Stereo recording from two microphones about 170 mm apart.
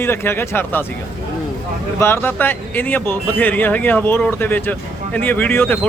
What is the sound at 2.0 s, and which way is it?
Speech, 15° left (ahead or behind).